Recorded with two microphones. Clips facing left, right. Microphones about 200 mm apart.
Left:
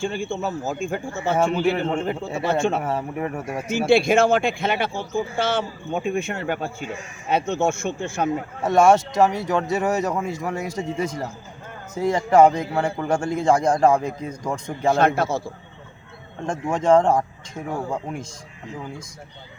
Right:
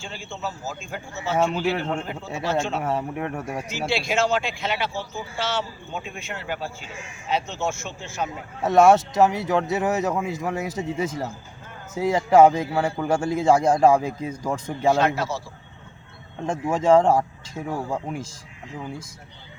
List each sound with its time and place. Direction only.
0.0 s a man's voice: 55° left (ahead or behind)
2.8 s a man's voice: centre (ahead or behind)
3.7 s a man's voice: 55° left (ahead or behind)
8.6 s a man's voice: centre (ahead or behind)
14.9 s a man's voice: 50° left (ahead or behind)
16.5 s a man's voice: 5° right (ahead or behind)